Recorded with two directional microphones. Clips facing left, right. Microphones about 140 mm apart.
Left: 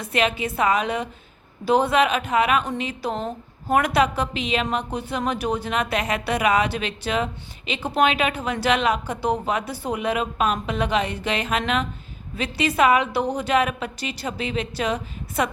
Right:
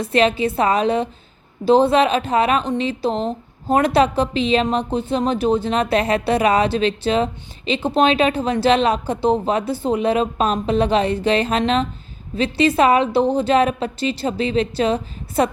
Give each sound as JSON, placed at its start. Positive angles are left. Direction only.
{"t": 0.0, "sound": "a woman's voice", "side_deg": -30}